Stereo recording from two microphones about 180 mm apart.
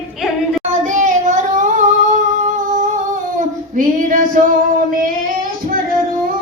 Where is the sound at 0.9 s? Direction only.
40° right (ahead or behind).